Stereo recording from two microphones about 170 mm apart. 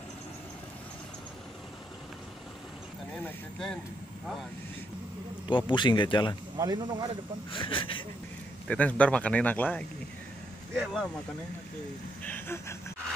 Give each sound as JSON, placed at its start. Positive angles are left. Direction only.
{"t": 3.3, "sound": "speech", "side_deg": 5}
{"t": 5.5, "sound": "speech", "side_deg": 25}
{"t": 6.6, "sound": "speech", "side_deg": -25}
{"t": 7.5, "sound": "speech", "side_deg": 30}
{"t": 8.6, "sound": "a man's voice", "side_deg": 10}
{"t": 12.2, "sound": "a man's voice", "side_deg": 10}